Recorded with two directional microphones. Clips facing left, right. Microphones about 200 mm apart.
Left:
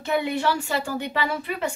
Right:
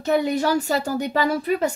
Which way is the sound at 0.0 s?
40° right (ahead or behind).